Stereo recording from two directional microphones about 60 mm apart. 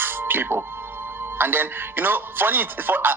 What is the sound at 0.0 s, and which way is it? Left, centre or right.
Speech, right.